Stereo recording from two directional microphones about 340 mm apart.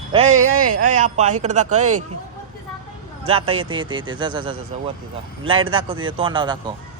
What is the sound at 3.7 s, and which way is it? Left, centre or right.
Speech, centre.